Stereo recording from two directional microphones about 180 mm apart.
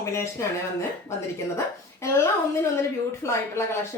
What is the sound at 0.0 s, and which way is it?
Speech, 15° left (ahead or behind).